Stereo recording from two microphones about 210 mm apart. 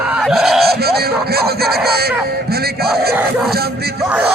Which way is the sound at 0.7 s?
50° right (ahead or behind).